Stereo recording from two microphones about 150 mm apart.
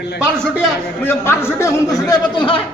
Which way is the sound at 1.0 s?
15° left (ahead or behind).